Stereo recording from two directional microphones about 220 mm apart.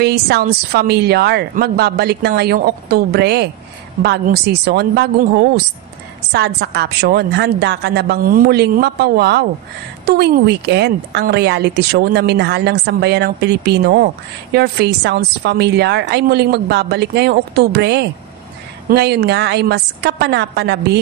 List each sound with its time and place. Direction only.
0.0 s a woman's voice: 45° right (ahead or behind)